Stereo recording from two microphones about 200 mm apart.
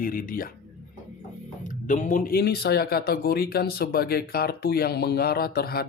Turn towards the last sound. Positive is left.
turn(degrees=50)  # may be behind; listen again after turning